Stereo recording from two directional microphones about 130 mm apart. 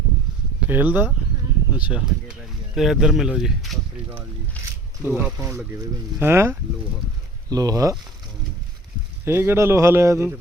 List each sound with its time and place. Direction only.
0.7 s speech: 15° right (ahead or behind)
5.0 s a man's voice: 10° right (ahead or behind)
9.2 s a man's voice: 20° right (ahead or behind)